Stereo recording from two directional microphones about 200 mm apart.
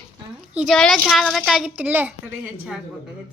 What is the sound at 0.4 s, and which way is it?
A woman's voice, 5° right (ahead or behind).